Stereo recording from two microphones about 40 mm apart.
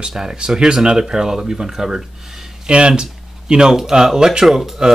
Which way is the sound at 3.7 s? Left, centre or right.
Centre.